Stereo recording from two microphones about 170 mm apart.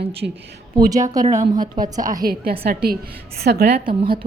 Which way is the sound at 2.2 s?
65° right (ahead or behind).